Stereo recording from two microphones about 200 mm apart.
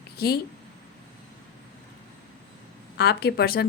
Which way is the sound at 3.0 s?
55° left (ahead or behind).